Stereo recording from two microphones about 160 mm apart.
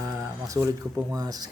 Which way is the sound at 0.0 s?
20° right (ahead or behind).